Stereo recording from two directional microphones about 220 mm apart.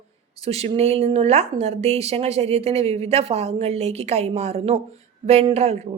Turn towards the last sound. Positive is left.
turn(degrees=-30)  # may be behind; listen again after turning